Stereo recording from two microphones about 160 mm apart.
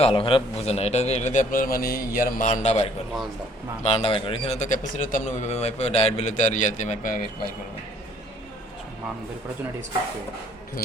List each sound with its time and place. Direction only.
0.0 s a man's voice: 35° left (ahead or behind); by 7.2 s 50° left (ahead or behind)